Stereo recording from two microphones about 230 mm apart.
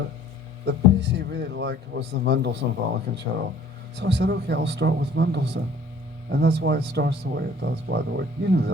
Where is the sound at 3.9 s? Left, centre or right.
Right.